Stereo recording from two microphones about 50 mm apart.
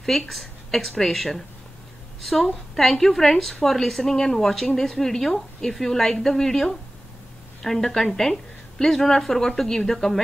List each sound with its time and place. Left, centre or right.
0.0 s speech: centre
2.7 s a woman's voice: centre